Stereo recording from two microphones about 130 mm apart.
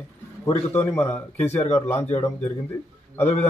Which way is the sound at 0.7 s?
15° left (ahead or behind).